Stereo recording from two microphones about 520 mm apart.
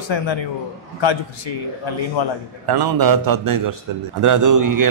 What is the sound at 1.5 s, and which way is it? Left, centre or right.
Speech, left.